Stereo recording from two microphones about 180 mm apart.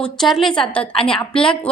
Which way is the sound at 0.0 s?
Centre (ahead or behind).